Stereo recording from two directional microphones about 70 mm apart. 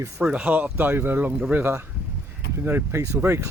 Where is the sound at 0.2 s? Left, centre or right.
Centre; by 1.3 s right.